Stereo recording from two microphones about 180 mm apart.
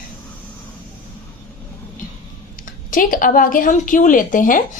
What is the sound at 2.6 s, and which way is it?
A woman's voice, 50° left (ahead or behind).